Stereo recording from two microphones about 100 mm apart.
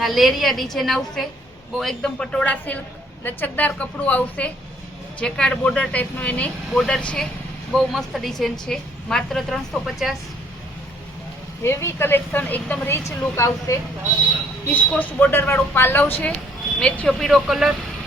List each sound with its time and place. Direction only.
0.0 s a woman's voice: centre (ahead or behind)
11.6 s speech: 25° left (ahead or behind)
14.7 s speech: 15° left (ahead or behind)
16.8 s a woman's voice: 5° left (ahead or behind)